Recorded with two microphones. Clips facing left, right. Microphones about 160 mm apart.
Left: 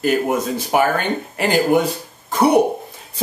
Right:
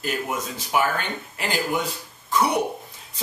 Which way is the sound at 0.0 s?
55° left (ahead or behind).